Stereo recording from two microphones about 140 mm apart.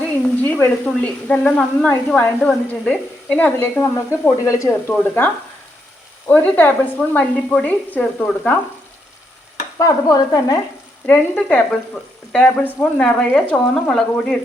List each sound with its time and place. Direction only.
0.4 s speech: 15° left (ahead or behind)
9.7 s stir: 25° left (ahead or behind)
11.0 s speech: 10° left (ahead or behind)